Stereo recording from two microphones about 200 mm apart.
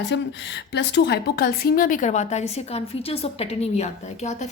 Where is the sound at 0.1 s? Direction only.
60° left (ahead or behind).